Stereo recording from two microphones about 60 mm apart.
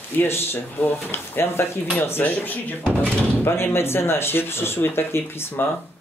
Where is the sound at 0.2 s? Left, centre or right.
Left.